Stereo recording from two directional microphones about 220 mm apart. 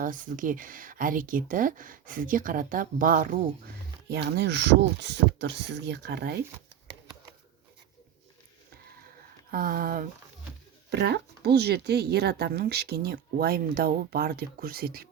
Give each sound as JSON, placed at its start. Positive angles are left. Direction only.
{"t": 0.0, "sound": "speech", "side_deg": -40}
{"t": 4.1, "sound": "speech", "side_deg": -50}
{"t": 9.5, "sound": "speech", "side_deg": -40}
{"t": 10.8, "sound": "speech", "side_deg": -50}